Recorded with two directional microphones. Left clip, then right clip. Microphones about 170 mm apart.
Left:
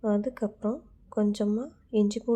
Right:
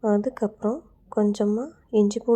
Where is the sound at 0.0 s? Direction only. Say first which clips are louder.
Right 5 dB; 25° right (ahead or behind).